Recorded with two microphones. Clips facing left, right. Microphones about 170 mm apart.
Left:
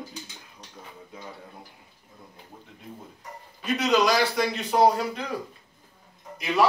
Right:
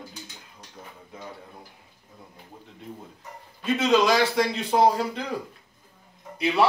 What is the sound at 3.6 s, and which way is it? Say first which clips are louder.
A man's voice: right 2 dB; 25° right (ahead or behind).